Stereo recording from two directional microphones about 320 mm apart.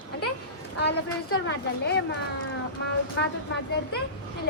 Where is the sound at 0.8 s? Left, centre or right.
Left.